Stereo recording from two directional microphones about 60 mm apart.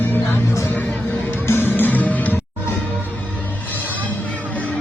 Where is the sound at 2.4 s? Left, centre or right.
Left.